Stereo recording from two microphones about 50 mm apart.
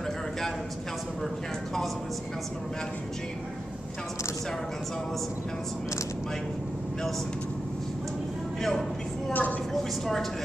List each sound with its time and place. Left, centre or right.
8.5 s a man's voice: centre
9.3 s a woman's voice: left